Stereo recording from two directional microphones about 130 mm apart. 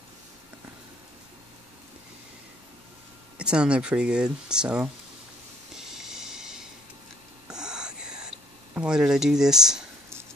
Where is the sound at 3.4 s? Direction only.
10° right (ahead or behind).